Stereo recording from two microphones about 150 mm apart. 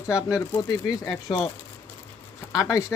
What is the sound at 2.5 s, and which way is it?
Speech, 20° left (ahead or behind).